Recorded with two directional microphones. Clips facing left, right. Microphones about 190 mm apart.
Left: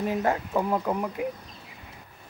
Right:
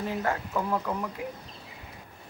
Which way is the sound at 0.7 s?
25° left (ahead or behind).